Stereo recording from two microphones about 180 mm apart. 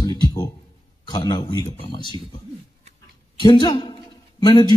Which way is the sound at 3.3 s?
25° left (ahead or behind).